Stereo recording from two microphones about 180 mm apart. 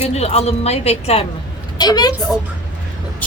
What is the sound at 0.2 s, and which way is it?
A woman's voice, 35° left (ahead or behind).